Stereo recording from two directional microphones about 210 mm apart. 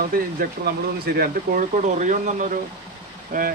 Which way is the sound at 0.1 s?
45° right (ahead or behind).